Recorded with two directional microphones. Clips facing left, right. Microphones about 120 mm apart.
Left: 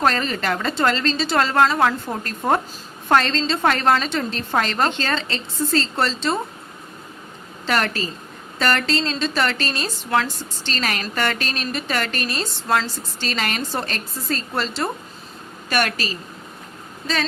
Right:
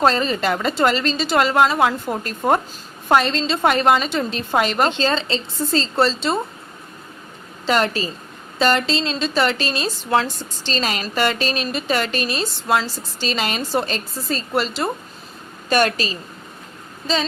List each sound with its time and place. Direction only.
0.0 s a woman's voice: 20° right (ahead or behind)
7.7 s a woman's voice: 15° right (ahead or behind)
15.7 s a woman's voice: 25° right (ahead or behind)